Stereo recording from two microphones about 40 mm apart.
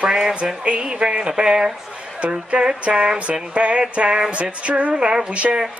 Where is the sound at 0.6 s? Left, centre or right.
Right.